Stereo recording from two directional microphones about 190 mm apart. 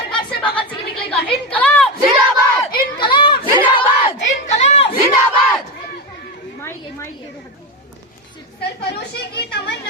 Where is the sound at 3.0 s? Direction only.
25° left (ahead or behind).